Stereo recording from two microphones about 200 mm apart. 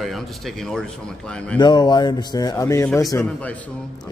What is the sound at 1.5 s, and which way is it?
A man's voice, 20° left (ahead or behind).